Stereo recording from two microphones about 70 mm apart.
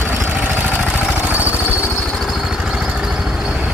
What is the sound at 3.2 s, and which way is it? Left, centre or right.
Vehicle, centre.